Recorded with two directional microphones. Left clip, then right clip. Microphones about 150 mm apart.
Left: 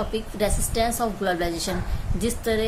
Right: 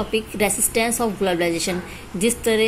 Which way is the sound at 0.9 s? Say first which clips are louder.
Right 3 dB; 20° right (ahead or behind).